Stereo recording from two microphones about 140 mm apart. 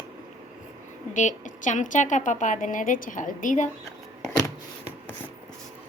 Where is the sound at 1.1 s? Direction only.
60° left (ahead or behind).